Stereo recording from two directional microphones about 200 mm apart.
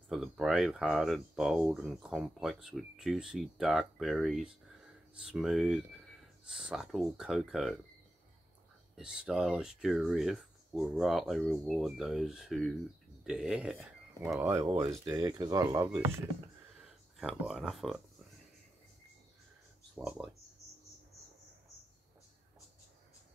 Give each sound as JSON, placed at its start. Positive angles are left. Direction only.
{"t": 0.1, "sound": "speech", "side_deg": 0}
{"t": 8.9, "sound": "speech", "side_deg": -5}
{"t": 16.8, "sound": "speech", "side_deg": -5}
{"t": 20.0, "sound": "speech", "side_deg": -5}